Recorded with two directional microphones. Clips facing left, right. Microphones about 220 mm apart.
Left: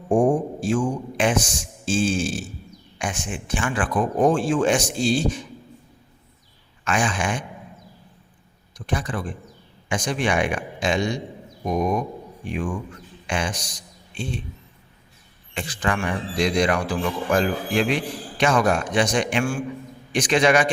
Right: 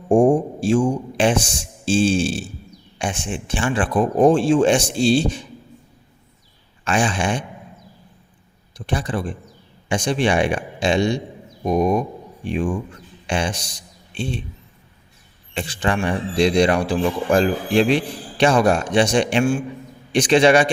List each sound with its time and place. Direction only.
0.1 s a man's voice: 30° right (ahead or behind)
6.8 s speech: 30° right (ahead or behind)
8.9 s speech: 30° right (ahead or behind)
15.5 s speech: 30° right (ahead or behind)